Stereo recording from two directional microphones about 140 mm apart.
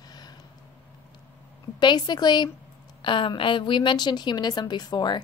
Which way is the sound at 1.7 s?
30° left (ahead or behind).